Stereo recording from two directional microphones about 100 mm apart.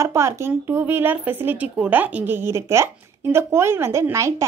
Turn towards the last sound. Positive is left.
turn(degrees=-30)  # may be behind; listen again after turning